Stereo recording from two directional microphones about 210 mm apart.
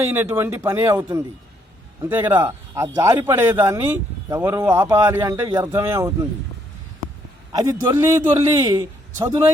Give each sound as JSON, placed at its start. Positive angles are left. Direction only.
{"t": 0.0, "sound": "speech", "side_deg": -10}
{"t": 7.5, "sound": "speech", "side_deg": -20}